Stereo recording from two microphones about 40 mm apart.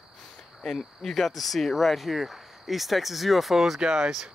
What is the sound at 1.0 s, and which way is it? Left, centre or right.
Speech, centre.